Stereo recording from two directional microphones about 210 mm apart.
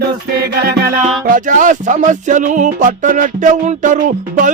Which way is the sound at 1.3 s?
40° right (ahead or behind).